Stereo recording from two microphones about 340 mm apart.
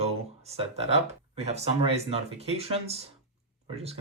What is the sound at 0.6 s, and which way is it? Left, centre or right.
Speech, centre.